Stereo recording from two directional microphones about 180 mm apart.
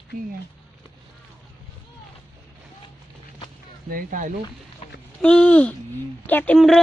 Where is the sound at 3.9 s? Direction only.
50° right (ahead or behind).